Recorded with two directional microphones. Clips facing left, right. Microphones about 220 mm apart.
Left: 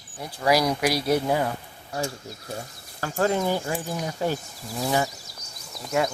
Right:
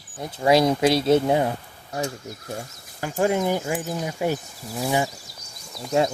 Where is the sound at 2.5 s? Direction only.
15° right (ahead or behind).